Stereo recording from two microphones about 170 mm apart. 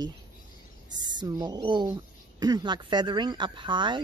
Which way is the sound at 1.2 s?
25° right (ahead or behind).